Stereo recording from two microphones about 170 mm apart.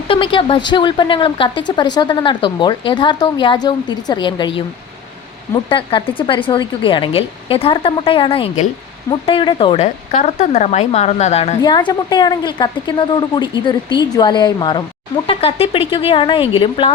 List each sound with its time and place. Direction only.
0.1 s speech: 30° left (ahead or behind)
5.6 s speech: 30° left (ahead or behind)
11.6 s speech: 25° left (ahead or behind)